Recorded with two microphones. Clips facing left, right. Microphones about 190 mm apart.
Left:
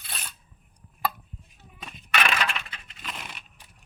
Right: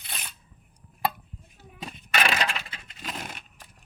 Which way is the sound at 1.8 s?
35° right (ahead or behind).